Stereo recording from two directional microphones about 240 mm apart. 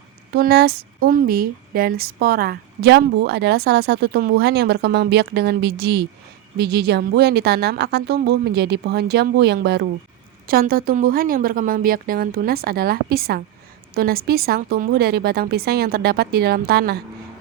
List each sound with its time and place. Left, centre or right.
0.3 s speech: right